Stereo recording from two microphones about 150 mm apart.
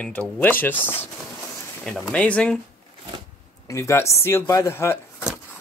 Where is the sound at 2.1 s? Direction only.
10° left (ahead or behind).